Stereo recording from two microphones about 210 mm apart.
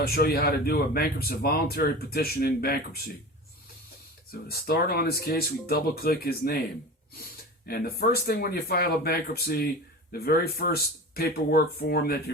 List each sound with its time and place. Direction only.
0.0 s speech: 45° left (ahead or behind)
4.4 s speech: 45° left (ahead or behind)
7.7 s speech: 45° left (ahead or behind)